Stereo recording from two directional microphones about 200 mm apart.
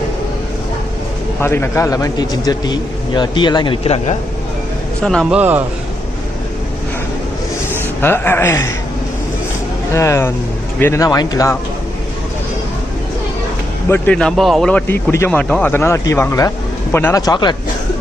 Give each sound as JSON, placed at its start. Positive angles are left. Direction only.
{"t": 1.4, "sound": "speech", "side_deg": 10}
{"t": 5.0, "sound": "speech", "side_deg": 0}
{"t": 8.0, "sound": "speech", "side_deg": 10}
{"t": 9.9, "sound": "speech", "side_deg": 15}
{"t": 13.8, "sound": "speech", "side_deg": 10}